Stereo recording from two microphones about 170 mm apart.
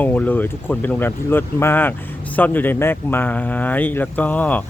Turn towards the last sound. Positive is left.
turn(degrees=10)  # may be behind; listen again after turning